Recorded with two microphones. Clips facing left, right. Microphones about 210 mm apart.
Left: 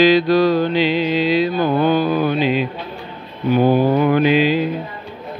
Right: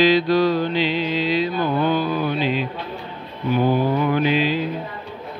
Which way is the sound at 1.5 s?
40° left (ahead or behind).